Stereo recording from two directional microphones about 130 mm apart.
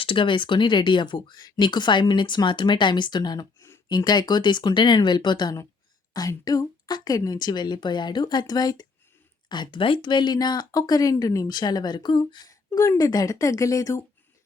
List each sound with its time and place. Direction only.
0.0 s speech: 40° left (ahead or behind); by 14.0 s 25° left (ahead or behind)